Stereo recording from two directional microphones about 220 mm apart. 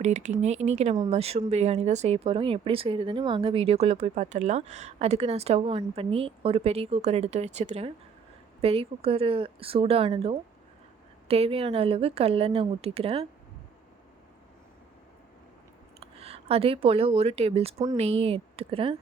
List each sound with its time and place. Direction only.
0.0 s speech: 30° right (ahead or behind)
16.0 s speech: 30° right (ahead or behind)